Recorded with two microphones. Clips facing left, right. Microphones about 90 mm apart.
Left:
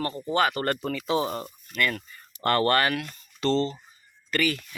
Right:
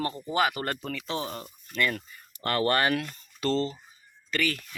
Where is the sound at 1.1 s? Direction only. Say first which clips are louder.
Left 8 dB; 5° left (ahead or behind).